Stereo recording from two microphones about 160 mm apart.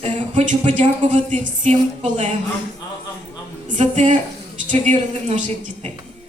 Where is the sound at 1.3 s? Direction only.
45° right (ahead or behind).